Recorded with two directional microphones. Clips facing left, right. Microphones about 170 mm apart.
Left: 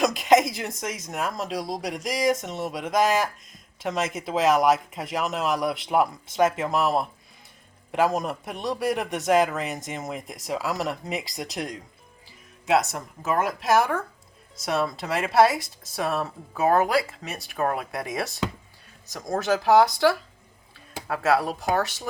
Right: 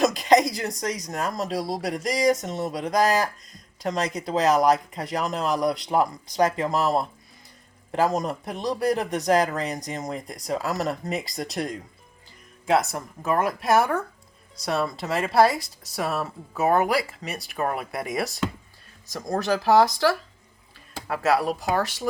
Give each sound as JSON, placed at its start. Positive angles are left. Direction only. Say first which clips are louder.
{"t": 0.0, "sound": "speech", "louder": "right 1 dB", "side_deg": 0}